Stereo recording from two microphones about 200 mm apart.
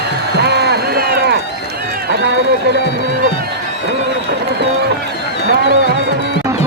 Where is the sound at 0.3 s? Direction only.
55° right (ahead or behind).